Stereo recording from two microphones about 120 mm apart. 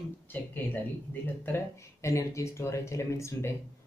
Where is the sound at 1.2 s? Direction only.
15° left (ahead or behind).